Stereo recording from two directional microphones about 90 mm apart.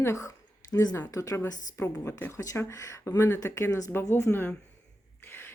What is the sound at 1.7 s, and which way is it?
Speech, 30° left (ahead or behind).